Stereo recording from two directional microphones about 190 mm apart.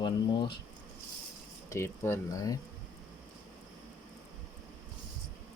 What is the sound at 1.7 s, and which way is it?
Speech, 15° left (ahead or behind).